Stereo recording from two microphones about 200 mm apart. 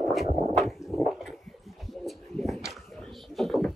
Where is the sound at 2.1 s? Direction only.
Centre (ahead or behind).